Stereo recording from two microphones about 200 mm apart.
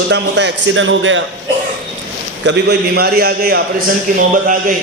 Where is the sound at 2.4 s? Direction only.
60° right (ahead or behind).